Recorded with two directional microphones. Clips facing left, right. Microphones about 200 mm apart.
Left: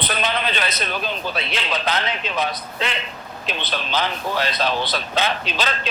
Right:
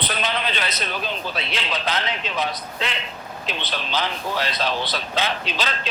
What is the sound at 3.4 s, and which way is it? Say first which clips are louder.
Speech: left 2 dB; 50° left (ahead or behind).